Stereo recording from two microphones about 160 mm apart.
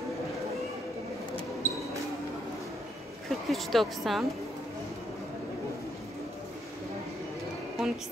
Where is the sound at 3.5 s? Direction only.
Centre (ahead or behind).